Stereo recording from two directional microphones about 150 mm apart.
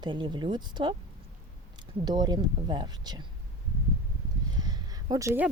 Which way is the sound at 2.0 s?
25° right (ahead or behind).